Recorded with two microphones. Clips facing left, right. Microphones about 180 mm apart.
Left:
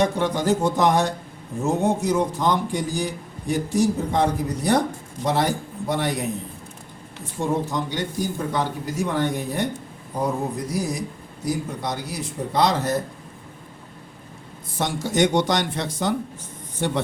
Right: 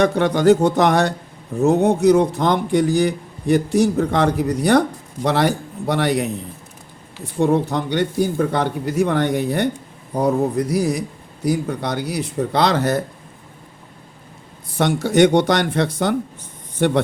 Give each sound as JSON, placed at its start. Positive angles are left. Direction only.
{"t": 0.0, "sound": "a man's voice", "side_deg": -65}
{"t": 7.4, "sound": "a man's voice", "side_deg": -65}
{"t": 14.8, "sound": "a man's voice", "side_deg": -65}